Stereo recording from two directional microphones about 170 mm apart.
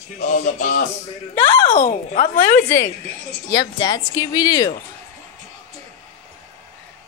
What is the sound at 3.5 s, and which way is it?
Speech, 25° left (ahead or behind).